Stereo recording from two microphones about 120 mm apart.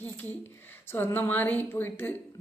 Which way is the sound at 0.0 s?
15° left (ahead or behind).